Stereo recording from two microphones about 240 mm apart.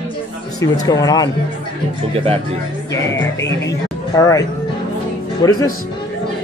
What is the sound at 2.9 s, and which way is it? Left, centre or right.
A man's voice, centre.